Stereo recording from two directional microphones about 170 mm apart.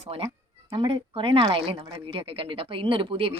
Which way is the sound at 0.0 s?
35° right (ahead or behind).